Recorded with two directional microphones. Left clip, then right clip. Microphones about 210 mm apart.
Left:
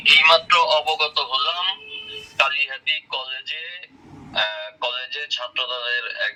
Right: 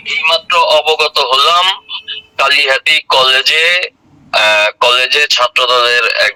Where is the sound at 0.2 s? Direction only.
15° right (ahead or behind).